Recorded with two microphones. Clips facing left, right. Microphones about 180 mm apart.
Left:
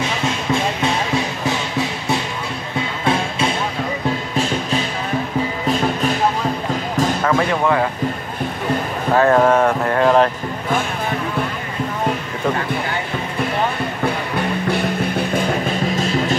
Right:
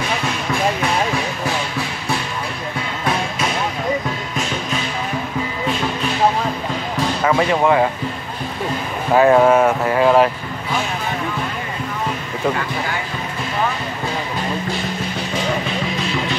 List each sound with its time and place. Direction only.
0.5 s music: 25° left (ahead or behind)
7.2 s speech: 15° right (ahead or behind)
9.1 s speech: 10° right (ahead or behind)
14.0 s music: 60° left (ahead or behind); by 16.3 s 45° left (ahead or behind)